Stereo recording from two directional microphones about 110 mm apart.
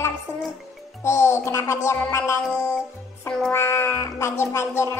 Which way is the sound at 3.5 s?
25° left (ahead or behind).